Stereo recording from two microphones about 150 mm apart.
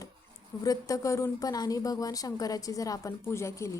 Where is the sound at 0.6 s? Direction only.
25° left (ahead or behind).